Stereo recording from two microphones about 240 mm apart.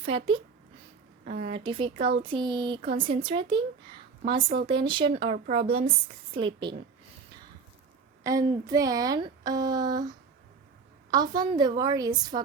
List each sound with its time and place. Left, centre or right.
0.0 s a woman's voice: right
1.2 s a woman's voice: right
1.5 s a woman's voice: right
8.2 s a woman's voice: centre